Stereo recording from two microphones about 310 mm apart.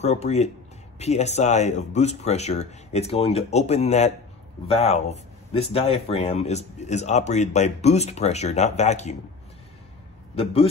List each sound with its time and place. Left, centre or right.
0.0 s speech: left
10.3 s speech: centre